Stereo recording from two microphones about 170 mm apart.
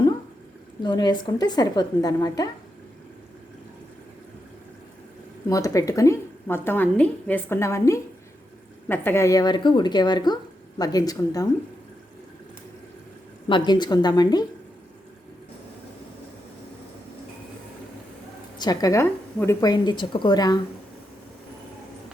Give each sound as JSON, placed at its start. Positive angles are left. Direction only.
{"t": 0.8, "sound": "a woman's voice", "side_deg": 25}
{"t": 5.5, "sound": "a woman's voice", "side_deg": 20}
{"t": 13.5, "sound": "a woman's voice", "side_deg": 25}
{"t": 18.5, "sound": "a woman's voice", "side_deg": 25}